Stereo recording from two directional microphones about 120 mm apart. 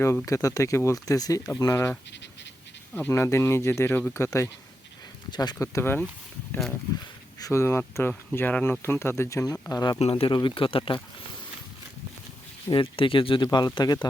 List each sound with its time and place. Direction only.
0.3 s speech: 25° left (ahead or behind)
2.9 s speech: 15° left (ahead or behind)
5.3 s speech: 35° left (ahead or behind)
5.7 s speech: 20° left (ahead or behind)
7.3 s speech: 25° left (ahead or behind)
10.0 s speech: 55° left (ahead or behind)
12.7 s speech: 45° left (ahead or behind)